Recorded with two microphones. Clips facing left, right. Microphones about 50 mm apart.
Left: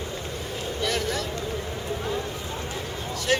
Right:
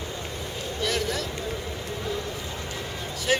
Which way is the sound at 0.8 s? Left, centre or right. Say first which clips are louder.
Even; centre.